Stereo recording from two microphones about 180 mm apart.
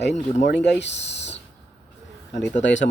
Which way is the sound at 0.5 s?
75° left (ahead or behind).